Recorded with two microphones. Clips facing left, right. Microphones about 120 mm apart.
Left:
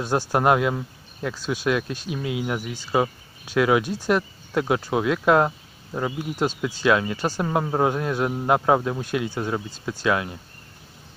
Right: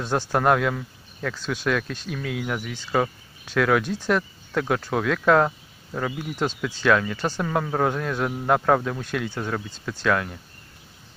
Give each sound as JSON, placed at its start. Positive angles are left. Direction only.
{"t": 0.0, "sound": "speech", "side_deg": 10}